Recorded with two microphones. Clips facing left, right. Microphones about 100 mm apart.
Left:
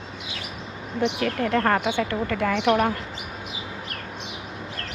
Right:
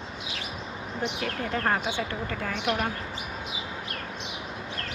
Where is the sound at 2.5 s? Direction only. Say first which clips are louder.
Left 7 dB; 80° left.